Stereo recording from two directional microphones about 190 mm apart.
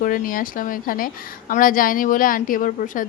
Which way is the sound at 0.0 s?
45° left (ahead or behind).